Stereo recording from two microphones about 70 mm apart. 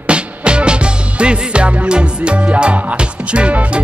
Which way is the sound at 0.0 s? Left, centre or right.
Centre.